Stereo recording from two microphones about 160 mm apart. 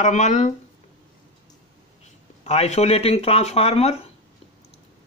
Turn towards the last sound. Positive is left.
turn(degrees=40)  # may be behind; listen again after turning